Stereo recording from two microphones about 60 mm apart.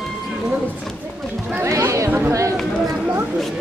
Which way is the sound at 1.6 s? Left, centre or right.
Right.